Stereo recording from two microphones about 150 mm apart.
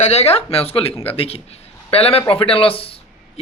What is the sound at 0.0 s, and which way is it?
Speech, 45° left (ahead or behind).